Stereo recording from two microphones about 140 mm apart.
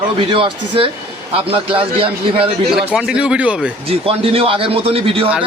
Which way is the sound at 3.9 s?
45° right (ahead or behind).